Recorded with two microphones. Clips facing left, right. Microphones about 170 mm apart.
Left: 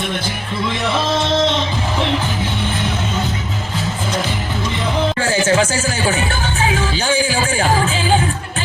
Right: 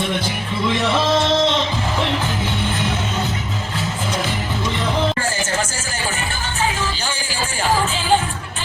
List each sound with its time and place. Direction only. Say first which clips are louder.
5.2 s music: left 7 dB; 75° left (ahead or behind)